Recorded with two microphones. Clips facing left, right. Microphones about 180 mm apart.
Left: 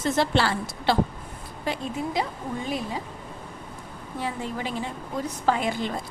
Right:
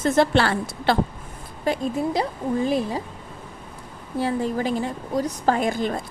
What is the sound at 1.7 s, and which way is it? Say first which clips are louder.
Speech: right 6 dB; 40° right (ahead or behind).